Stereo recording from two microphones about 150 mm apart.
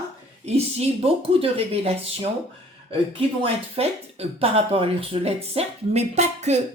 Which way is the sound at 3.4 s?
40° right (ahead or behind).